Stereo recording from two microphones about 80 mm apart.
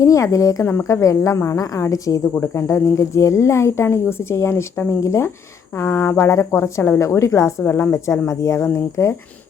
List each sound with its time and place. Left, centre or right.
0.0 s speech: left
0.6 s speech: left
1.0 s speech: left
2.3 s speech: left
7.6 s speech: left